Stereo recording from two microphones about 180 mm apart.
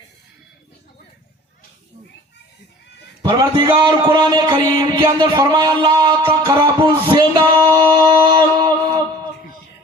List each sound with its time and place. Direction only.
3.2 s a man's voice: 25° right (ahead or behind)